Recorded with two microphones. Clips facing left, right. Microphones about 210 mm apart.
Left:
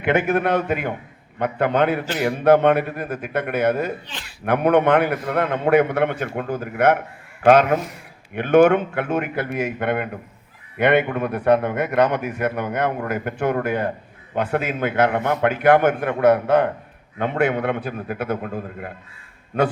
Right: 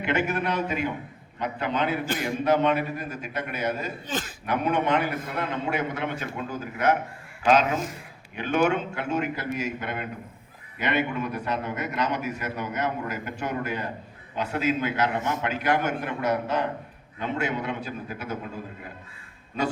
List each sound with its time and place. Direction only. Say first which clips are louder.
0.0 s a man's voice: left 7 dB; 55° left (ahead or behind)